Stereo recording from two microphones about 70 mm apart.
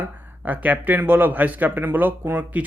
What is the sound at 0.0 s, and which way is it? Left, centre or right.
Speech, right.